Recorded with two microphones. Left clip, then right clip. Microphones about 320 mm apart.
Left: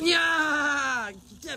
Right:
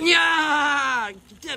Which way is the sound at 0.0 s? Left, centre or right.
Centre.